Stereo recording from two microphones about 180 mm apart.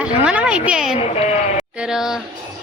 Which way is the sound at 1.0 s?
35° left (ahead or behind).